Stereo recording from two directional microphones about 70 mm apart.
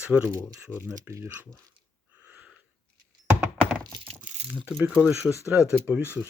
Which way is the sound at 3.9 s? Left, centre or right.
Right.